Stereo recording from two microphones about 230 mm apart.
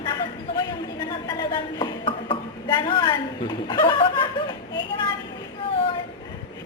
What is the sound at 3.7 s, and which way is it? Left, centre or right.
Snicker, left.